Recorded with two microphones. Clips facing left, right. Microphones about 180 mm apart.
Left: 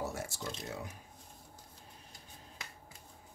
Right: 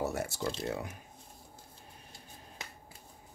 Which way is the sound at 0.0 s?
65° right (ahead or behind).